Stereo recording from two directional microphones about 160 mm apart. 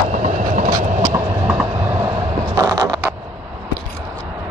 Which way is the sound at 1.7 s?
20° right (ahead or behind).